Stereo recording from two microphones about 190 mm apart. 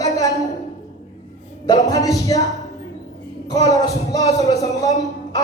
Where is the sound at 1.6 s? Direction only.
20° left (ahead or behind).